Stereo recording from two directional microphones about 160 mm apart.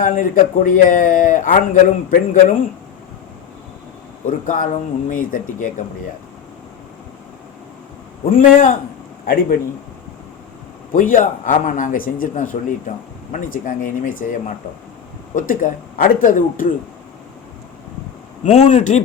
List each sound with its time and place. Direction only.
0.0 s a man's voice: 55° left (ahead or behind)
4.3 s a man's voice: 55° left (ahead or behind)
8.3 s a man's voice: 55° left (ahead or behind)
10.9 s a man's voice: 55° left (ahead or behind)
18.4 s a man's voice: 45° left (ahead or behind)